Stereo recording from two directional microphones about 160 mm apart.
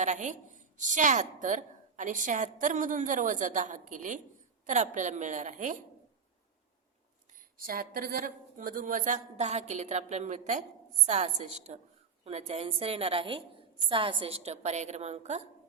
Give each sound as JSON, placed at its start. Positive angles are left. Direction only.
{"t": 0.0, "sound": "a woman's voice", "side_deg": -50}
{"t": 7.3, "sound": "a woman's voice", "side_deg": -65}